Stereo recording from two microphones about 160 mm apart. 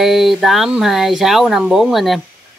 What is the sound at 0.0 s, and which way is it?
Speech, centre (ahead or behind).